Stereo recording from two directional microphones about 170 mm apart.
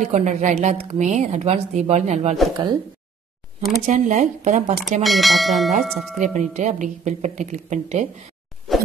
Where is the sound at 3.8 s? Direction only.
45° right (ahead or behind).